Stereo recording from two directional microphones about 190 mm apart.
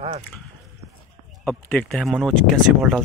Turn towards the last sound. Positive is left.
turn(degrees=0)  # may be behind; listen again after turning